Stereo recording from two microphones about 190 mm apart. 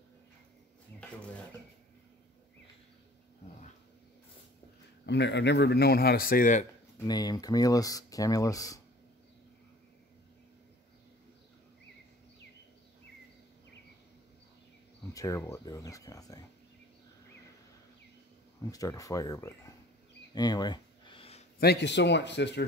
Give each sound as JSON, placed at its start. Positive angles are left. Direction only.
{"t": 5.0, "sound": "speech", "side_deg": 65}
{"t": 7.1, "sound": "speech", "side_deg": 20}
{"t": 15.1, "sound": "speech", "side_deg": 15}
{"t": 18.6, "sound": "speech", "side_deg": 20}
{"t": 20.3, "sound": "a sound", "side_deg": 20}
{"t": 21.5, "sound": "speech", "side_deg": 60}